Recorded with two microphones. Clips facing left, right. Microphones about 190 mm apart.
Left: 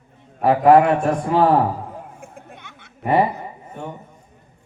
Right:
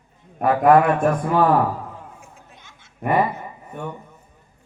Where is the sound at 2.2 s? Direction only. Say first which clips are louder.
Left 7 dB; 55° left (ahead or behind).